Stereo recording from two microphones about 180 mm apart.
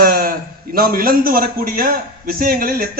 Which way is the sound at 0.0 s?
55° right (ahead or behind).